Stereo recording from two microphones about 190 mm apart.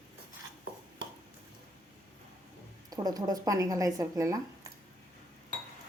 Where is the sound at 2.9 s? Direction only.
20° right (ahead or behind).